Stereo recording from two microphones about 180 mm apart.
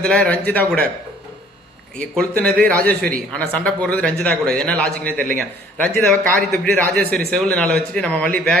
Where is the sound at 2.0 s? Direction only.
5° left (ahead or behind).